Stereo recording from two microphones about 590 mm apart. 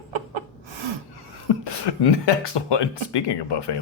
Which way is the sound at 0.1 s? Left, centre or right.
Right.